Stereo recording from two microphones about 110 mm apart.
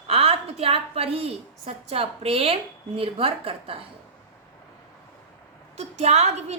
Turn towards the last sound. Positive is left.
turn(degrees=-80)